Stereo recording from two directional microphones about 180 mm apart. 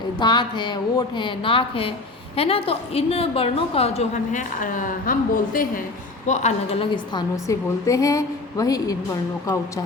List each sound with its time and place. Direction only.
0.2 s a woman's voice: 25° left (ahead or behind); by 6.8 s 40° left (ahead or behind)
6.9 s a woman's voice: 25° left (ahead or behind)